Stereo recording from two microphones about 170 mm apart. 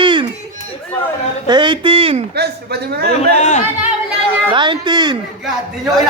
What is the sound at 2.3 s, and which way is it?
Speech, 70° right (ahead or behind).